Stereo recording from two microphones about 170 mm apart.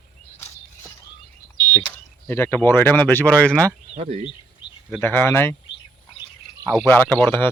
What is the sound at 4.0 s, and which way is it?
Speech, 35° right (ahead or behind).